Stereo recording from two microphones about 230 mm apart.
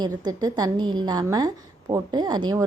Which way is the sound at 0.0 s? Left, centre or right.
Centre.